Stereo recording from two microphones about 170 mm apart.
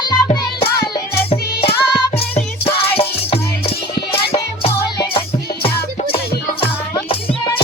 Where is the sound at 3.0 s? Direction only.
35° left (ahead or behind).